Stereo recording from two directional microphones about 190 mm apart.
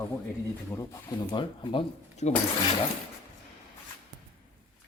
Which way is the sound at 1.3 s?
25° left (ahead or behind).